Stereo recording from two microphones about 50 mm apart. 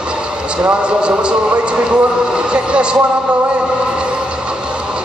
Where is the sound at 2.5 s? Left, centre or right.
Right.